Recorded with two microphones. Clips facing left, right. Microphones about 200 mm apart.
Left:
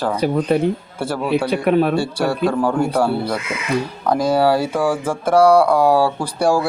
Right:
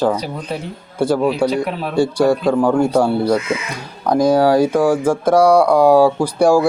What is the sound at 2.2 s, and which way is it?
Speech, 15° right (ahead or behind).